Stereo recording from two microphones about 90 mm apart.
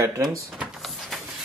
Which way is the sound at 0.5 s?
Centre (ahead or behind).